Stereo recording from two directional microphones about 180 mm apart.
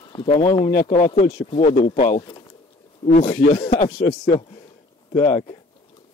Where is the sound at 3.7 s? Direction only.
45° left (ahead or behind).